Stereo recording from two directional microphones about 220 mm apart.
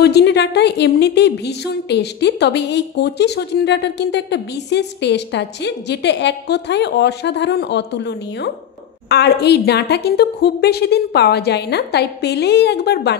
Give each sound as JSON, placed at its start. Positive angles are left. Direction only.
{"t": 0.0, "sound": "a woman's voice", "side_deg": 50}